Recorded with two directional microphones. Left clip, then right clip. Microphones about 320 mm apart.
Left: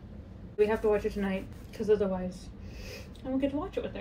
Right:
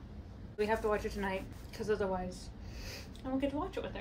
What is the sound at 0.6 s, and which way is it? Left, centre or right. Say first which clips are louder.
A woman's voice: left 6 dB; centre.